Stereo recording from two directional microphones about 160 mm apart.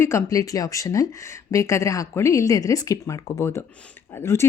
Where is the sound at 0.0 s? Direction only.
15° left (ahead or behind).